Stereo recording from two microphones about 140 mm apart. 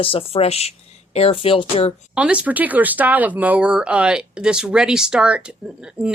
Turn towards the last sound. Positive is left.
turn(degrees=-5)  # may be behind; listen again after turning